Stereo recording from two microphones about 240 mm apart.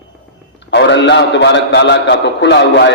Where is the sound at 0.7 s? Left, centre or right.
Left.